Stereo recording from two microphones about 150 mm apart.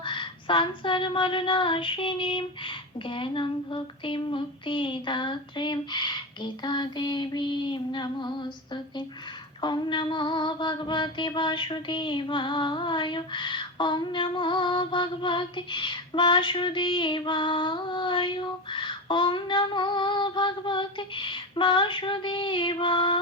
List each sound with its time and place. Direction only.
0.0 s female singing: 35° left (ahead or behind)